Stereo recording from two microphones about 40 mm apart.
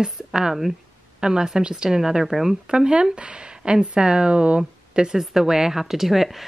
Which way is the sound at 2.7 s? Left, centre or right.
Right.